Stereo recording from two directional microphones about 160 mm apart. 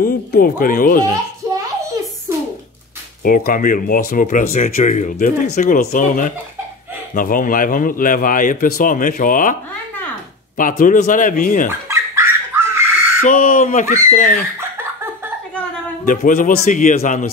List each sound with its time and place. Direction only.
0.0 s speech: 65° left (ahead or behind)
3.3 s speech: 60° left (ahead or behind)
10.6 s speech: 55° left (ahead or behind)
11.9 s dog: 15° right (ahead or behind)
13.2 s speech: 60° left (ahead or behind)
16.1 s speech: 55° left (ahead or behind)